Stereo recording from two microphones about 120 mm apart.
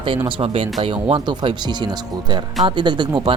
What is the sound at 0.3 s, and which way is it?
Speech, 50° right (ahead or behind).